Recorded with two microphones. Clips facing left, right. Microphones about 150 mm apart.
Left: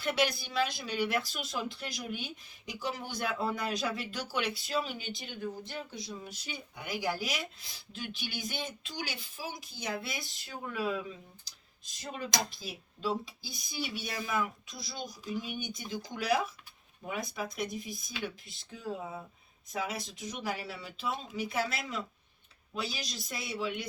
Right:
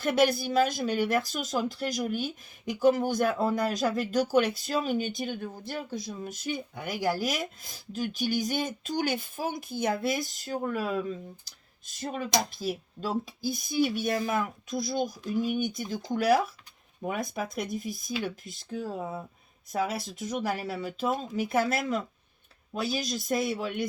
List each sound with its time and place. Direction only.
0.0 s speech: 50° right (ahead or behind)
11.9 s speech: 50° right (ahead or behind)